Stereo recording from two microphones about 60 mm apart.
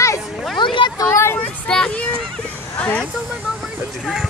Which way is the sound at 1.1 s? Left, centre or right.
Left.